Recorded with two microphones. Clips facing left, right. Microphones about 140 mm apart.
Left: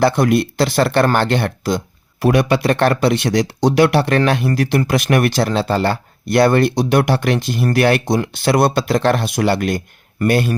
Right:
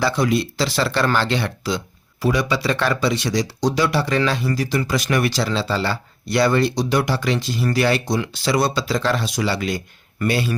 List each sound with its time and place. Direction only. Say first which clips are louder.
0.0 s speech: left 5 dB; 55° left (ahead or behind)